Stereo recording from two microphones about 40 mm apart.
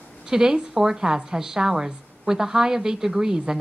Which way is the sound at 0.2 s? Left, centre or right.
Centre.